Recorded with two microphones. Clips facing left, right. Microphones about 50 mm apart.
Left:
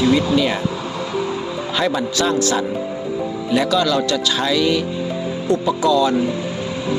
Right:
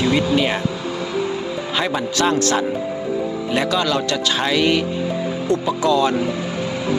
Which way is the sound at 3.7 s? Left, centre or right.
Right.